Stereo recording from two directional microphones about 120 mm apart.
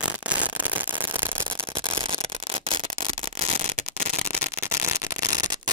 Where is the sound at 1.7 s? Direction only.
50° right (ahead or behind); by 4.4 s 65° right (ahead or behind).